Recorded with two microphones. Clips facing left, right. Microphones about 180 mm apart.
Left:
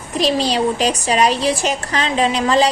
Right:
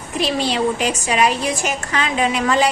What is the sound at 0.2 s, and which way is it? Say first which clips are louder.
A woman's voice: left 2 dB; 35° left (ahead or behind).